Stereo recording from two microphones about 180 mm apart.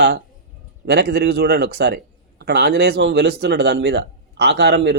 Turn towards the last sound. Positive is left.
turn(degrees=-70)  # may be behind; listen again after turning